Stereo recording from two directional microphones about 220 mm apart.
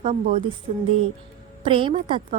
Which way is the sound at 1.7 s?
25° right (ahead or behind).